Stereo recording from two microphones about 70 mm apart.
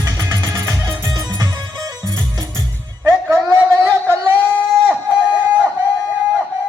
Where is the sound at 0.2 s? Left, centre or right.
Right.